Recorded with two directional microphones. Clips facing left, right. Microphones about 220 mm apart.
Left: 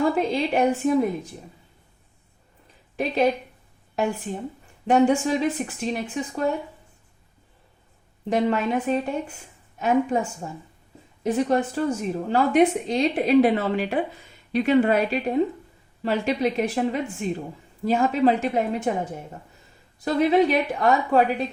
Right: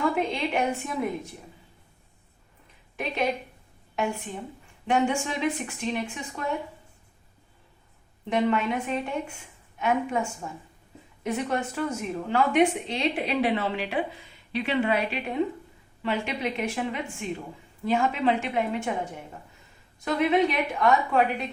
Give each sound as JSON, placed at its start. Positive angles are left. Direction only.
{"t": 0.1, "sound": "a woman's voice", "side_deg": 35}
{"t": 2.9, "sound": "a woman's voice", "side_deg": 35}
{"t": 8.3, "sound": "a woman's voice", "side_deg": 40}
{"t": 20.1, "sound": "a woman's voice", "side_deg": 35}